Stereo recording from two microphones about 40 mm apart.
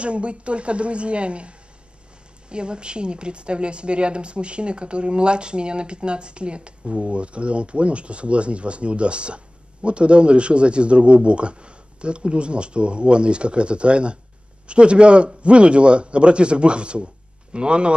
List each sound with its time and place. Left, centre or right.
0.0 s a woman's voice: right
2.5 s a woman's voice: right